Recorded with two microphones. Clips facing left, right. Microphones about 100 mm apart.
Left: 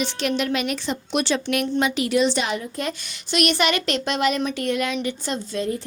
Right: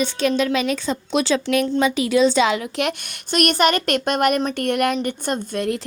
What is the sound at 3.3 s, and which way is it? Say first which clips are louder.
Speech: right 3 dB; 45° right (ahead or behind).